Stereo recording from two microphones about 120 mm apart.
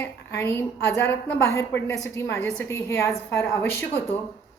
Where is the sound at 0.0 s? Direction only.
20° left (ahead or behind).